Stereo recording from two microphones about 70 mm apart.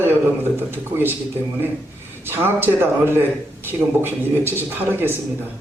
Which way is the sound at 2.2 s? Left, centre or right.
Right.